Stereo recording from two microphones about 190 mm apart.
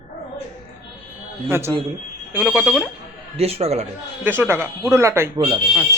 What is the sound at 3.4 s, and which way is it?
Speech, 30° right (ahead or behind).